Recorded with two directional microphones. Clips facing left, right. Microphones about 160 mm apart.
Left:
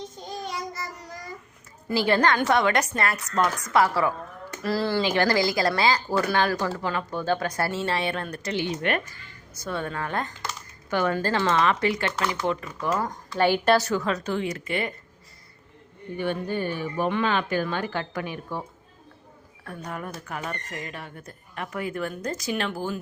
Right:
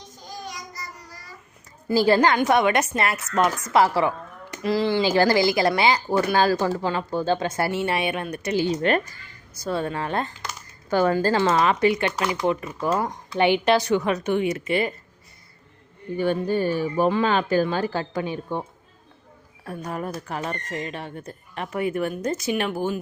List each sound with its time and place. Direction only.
0.2 s child singing: 25° left (ahead or behind)
1.9 s speech: 35° right (ahead or behind)
4.5 s speech: 15° right (ahead or behind)
5.0 s speech: 30° right (ahead or behind)
8.6 s speech: 35° right (ahead or behind)
10.8 s speech: 35° right (ahead or behind)
16.1 s speech: 40° right (ahead or behind)
19.6 s speech: 25° right (ahead or behind)